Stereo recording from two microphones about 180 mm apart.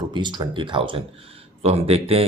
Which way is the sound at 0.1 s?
25° right (ahead or behind).